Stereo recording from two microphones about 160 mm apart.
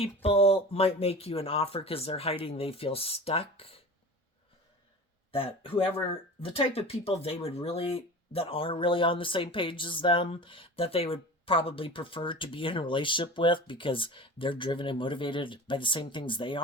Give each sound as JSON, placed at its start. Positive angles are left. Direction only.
{"t": 0.0, "sound": "speech", "side_deg": 40}
{"t": 5.3, "sound": "speech", "side_deg": 35}